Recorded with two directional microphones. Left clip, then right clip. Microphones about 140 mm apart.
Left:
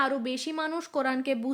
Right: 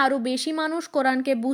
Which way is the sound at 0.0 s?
35° right (ahead or behind).